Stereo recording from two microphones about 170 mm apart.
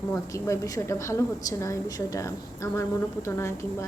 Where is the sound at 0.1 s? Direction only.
15° left (ahead or behind).